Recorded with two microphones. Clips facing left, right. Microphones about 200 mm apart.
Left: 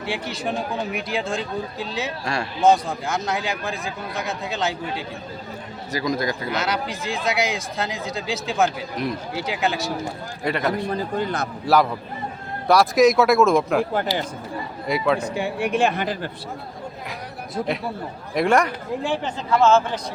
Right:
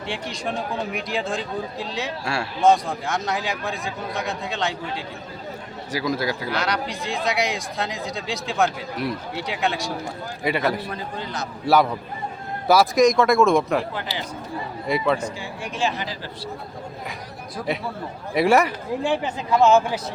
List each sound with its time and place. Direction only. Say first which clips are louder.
0.1 s speech: left 2 dB; 5° left (ahead or behind)
2.2 s speech: even; 10° right (ahead or behind)
5.9 s speech: even; 5° right (ahead or behind)
6.5 s speech: even; 5° left (ahead or behind)
11.2 s speech: left 6 dB; 55° left (ahead or behind)
12.6 s speech: left 1 dB; centre (ahead or behind)
13.9 s speech: left 7 dB; 45° left (ahead or behind)
14.8 s speech: left 1 dB; centre (ahead or behind)
15.2 s speech: left 6 dB; 60° left (ahead or behind)
18.3 s speech: right 1 dB; 5° right (ahead or behind)